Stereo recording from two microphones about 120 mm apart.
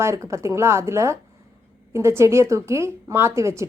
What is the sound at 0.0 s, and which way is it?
Speech, 25° right (ahead or behind).